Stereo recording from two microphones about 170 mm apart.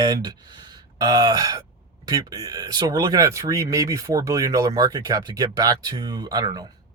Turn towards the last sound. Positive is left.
turn(degrees=-25)  # may be behind; listen again after turning